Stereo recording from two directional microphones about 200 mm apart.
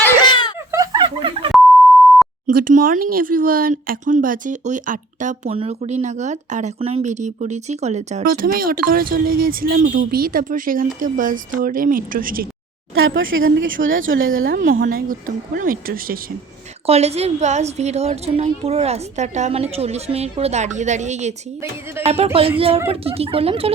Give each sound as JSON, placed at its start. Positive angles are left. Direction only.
{"t": 0.2, "sound": "a sound", "side_deg": 20}
{"t": 0.7, "sound": "a sound", "side_deg": -20}
{"t": 2.5, "sound": "speech", "side_deg": -45}
{"t": 8.3, "sound": "speech", "side_deg": -45}
{"t": 12.9, "sound": "a woman's voice", "side_deg": -75}
{"t": 14.4, "sound": "speech", "side_deg": -45}
{"t": 16.8, "sound": "speech", "side_deg": -30}